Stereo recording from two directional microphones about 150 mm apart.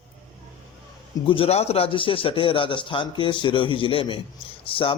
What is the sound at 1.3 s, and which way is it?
A man's voice, 40° left (ahead or behind).